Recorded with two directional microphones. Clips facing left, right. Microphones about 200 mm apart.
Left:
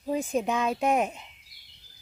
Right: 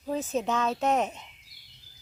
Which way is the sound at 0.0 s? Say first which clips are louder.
Left 2 dB; 15° left (ahead or behind).